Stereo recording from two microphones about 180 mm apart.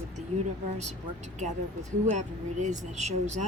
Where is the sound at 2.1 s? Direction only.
40° right (ahead or behind).